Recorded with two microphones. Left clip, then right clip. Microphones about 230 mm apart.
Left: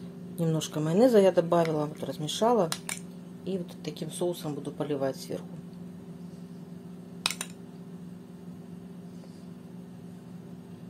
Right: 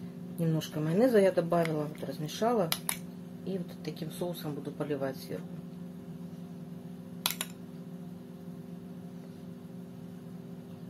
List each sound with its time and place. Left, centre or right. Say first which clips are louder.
0.4 s speech: left 4 dB; left
3.8 s speech: left 8 dB; left